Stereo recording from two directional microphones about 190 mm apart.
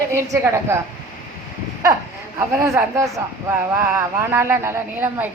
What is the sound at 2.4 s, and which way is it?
A woman's voice, 15° right (ahead or behind).